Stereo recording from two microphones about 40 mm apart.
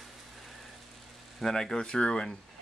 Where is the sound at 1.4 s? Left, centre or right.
Centre.